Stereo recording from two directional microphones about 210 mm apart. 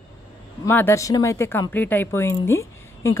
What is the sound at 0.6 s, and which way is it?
Speech, 10° left (ahead or behind).